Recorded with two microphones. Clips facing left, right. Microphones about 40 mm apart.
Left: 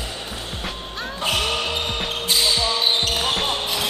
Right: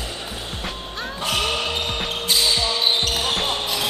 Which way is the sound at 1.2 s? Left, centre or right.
Centre.